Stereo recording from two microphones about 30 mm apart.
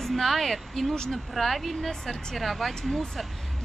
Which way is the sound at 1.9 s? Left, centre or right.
Centre.